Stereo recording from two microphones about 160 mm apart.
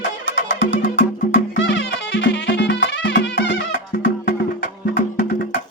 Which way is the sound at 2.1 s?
90° left.